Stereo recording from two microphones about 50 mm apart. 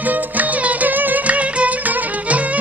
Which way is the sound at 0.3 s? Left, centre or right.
Right.